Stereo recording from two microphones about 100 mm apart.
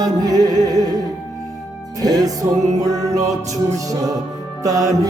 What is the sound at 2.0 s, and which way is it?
Music, 40° right (ahead or behind).